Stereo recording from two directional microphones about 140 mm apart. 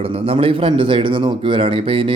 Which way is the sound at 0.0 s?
45° right (ahead or behind).